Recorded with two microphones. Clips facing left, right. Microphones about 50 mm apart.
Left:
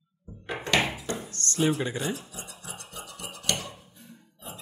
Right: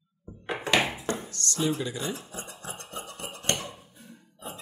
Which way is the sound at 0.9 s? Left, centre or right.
Right.